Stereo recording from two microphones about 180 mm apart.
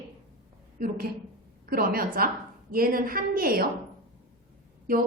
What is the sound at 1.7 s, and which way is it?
A woman's voice, 55° right (ahead or behind).